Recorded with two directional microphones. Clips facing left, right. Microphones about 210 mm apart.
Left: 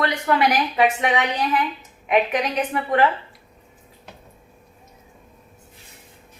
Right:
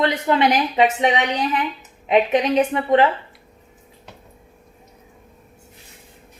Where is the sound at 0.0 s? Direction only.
25° right (ahead or behind).